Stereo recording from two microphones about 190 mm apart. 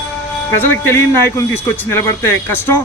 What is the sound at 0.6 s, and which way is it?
A man's voice, 10° left (ahead or behind).